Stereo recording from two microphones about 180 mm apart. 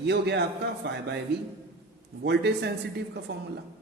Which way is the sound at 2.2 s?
65° right (ahead or behind).